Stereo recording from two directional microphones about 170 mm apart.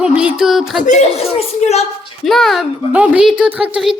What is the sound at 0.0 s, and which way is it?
Speech, 5° right (ahead or behind).